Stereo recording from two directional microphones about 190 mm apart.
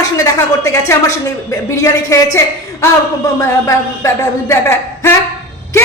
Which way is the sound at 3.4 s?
15° left (ahead or behind).